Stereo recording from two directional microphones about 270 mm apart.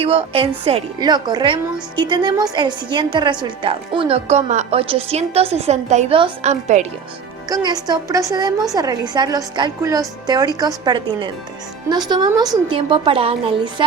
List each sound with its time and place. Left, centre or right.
0.0 s a woman's voice: right
7.5 s a woman's voice: centre